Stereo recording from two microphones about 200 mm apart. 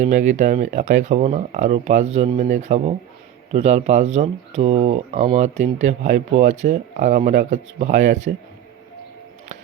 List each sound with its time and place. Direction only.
0.0 s speech: 35° right (ahead or behind)